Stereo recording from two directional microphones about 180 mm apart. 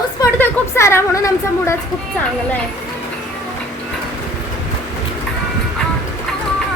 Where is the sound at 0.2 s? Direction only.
15° left (ahead or behind).